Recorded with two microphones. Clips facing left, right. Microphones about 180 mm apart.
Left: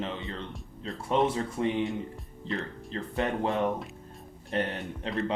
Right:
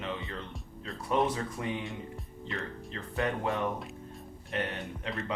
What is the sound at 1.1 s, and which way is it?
Speech, 25° left (ahead or behind).